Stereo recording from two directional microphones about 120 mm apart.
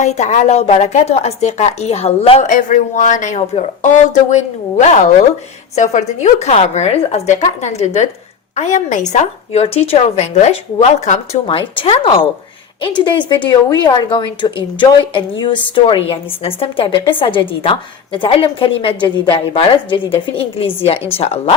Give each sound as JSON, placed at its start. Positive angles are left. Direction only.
{"t": 0.0, "sound": "a woman's voice", "side_deg": 75}
{"t": 2.4, "sound": "a woman's voice", "side_deg": 90}
{"t": 8.5, "sound": "a woman's voice", "side_deg": 85}
{"t": 11.4, "sound": "speech", "side_deg": 50}
{"t": 13.5, "sound": "a woman's voice", "side_deg": 35}